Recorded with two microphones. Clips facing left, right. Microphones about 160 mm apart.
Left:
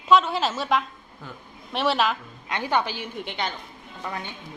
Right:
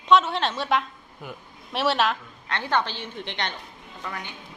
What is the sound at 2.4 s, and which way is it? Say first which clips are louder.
A woman's voice: left 1 dB; 10° left (ahead or behind).